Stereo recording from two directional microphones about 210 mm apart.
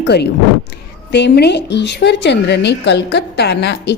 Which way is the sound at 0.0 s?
50° left (ahead or behind).